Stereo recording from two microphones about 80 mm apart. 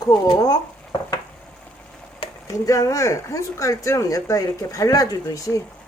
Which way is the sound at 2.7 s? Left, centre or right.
Left.